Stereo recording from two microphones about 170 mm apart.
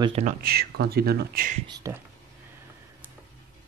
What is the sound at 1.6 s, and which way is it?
Speech, 25° right (ahead or behind).